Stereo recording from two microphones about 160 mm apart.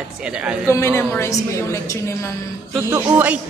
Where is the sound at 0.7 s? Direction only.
15° left (ahead or behind).